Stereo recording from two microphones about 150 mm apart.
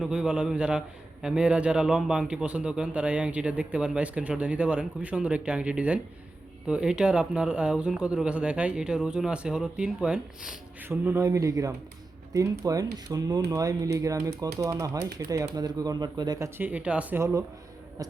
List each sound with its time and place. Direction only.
0.0 s a man's voice: 5° right (ahead or behind); by 16.5 s 25° right (ahead or behind)
16.6 s a man's voice: 10° right (ahead or behind)